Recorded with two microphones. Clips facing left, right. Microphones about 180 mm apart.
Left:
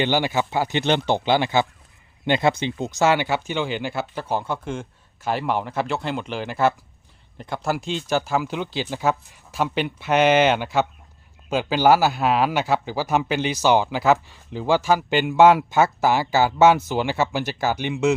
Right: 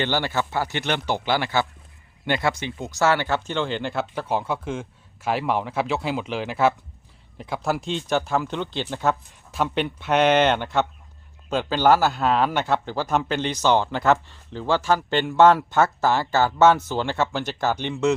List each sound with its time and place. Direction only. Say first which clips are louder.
0.0 s a man's voice: left 3 dB; 15° left (ahead or behind)